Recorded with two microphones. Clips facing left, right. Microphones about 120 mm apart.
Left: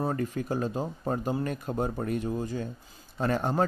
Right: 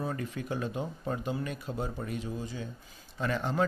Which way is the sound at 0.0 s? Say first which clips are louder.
Left 5 dB; 40° left (ahead or behind).